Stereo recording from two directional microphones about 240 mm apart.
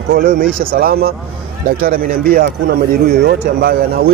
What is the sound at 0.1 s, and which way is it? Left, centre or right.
Speech, right.